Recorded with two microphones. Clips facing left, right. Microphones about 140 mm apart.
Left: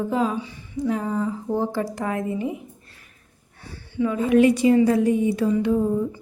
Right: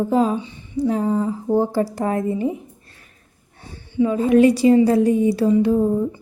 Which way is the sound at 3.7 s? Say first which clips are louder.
Right 5 dB; 25° right (ahead or behind).